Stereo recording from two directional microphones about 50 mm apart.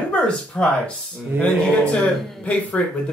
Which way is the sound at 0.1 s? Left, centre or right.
Centre.